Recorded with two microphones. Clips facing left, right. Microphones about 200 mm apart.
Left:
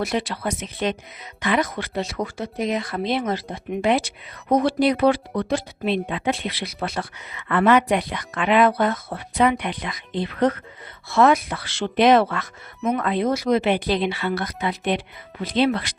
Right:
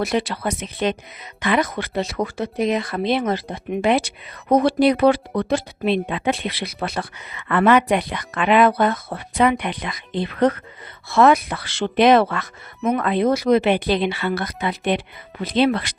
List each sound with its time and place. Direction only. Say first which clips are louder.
0.0 s a woman's voice: right 3 dB; 70° right (ahead or behind)